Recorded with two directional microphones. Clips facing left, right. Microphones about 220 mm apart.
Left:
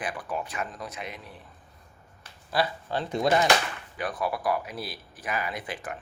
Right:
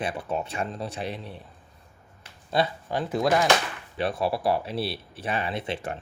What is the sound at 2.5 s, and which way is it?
Speech, 25° right (ahead or behind).